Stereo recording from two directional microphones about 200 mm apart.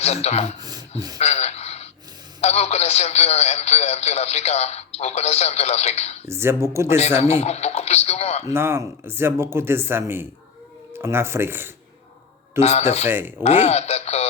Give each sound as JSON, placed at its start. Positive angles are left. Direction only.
{"t": 0.0, "sound": "speech", "side_deg": 30}
{"t": 0.6, "sound": "a sound", "side_deg": -20}
{"t": 1.2, "sound": "a sound", "side_deg": 30}
{"t": 2.4, "sound": "speech", "side_deg": 35}
{"t": 6.2, "sound": "speech", "side_deg": -10}
{"t": 7.2, "sound": "speech", "side_deg": 30}
{"t": 8.4, "sound": "speech", "side_deg": -10}
{"t": 12.5, "sound": "speech", "side_deg": 30}
{"t": 13.1, "sound": "speech", "side_deg": -10}
{"t": 13.4, "sound": "speech", "side_deg": 35}